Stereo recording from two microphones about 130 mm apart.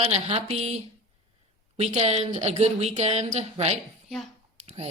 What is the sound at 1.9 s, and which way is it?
A woman's voice, 55° right (ahead or behind).